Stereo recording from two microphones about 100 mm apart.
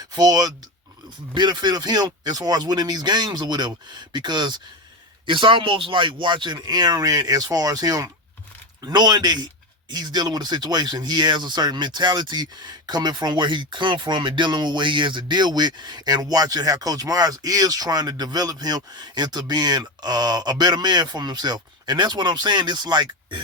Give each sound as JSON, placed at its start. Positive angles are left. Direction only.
{"t": 0.1, "sound": "speech", "side_deg": -40}